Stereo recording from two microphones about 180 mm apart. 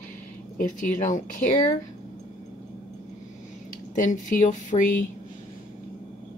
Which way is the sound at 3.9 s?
45° left (ahead or behind).